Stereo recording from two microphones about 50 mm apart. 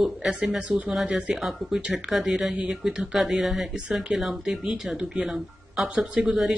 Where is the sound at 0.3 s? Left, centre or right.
Centre.